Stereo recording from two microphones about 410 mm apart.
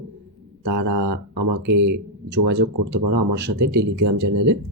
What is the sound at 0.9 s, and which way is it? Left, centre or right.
Speech, right.